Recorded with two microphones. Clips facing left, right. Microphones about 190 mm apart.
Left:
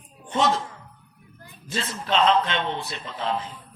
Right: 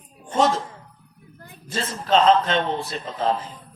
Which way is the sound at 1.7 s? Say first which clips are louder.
Right 5 dB; 40° right (ahead or behind).